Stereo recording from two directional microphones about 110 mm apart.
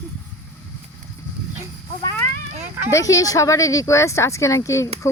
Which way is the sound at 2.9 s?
30° left (ahead or behind).